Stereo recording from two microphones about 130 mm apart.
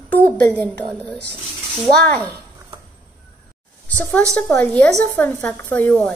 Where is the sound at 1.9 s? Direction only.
10° left (ahead or behind).